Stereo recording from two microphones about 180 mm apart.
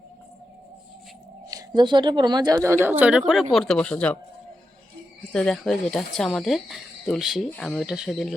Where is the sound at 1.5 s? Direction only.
20° right (ahead or behind); by 4.2 s 5° left (ahead or behind).